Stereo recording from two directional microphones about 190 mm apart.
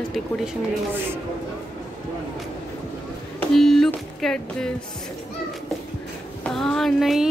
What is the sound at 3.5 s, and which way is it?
Music, centre (ahead or behind).